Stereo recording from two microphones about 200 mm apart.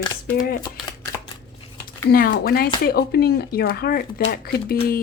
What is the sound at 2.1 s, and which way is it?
Speech, 45° left (ahead or behind).